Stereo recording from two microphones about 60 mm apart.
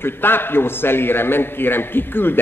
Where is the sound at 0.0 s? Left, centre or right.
Left.